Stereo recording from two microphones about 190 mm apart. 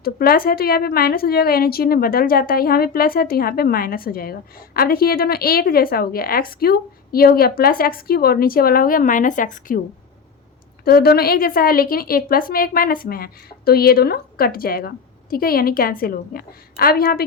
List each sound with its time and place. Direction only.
0.0 s a woman's voice: 50° left (ahead or behind)
10.8 s a woman's voice: 55° left (ahead or behind)